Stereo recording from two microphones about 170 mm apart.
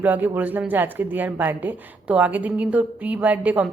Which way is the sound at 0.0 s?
10° right (ahead or behind).